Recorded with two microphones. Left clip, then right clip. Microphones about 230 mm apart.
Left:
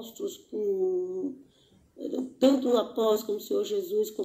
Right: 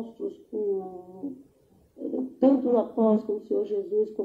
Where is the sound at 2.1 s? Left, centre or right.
Left.